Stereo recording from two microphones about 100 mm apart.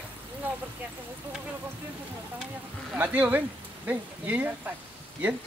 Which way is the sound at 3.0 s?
15° right (ahead or behind).